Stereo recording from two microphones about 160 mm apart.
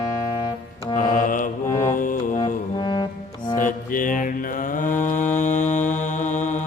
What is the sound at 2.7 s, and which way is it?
Brass instrument, 25° left (ahead or behind).